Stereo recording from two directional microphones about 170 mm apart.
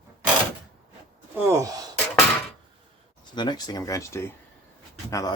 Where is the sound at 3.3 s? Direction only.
25° left (ahead or behind).